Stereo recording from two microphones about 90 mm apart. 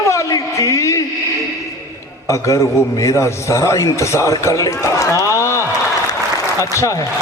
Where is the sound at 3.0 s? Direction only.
35° left (ahead or behind).